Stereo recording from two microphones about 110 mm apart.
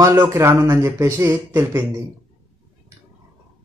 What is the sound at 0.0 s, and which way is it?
Speech, 25° right (ahead or behind).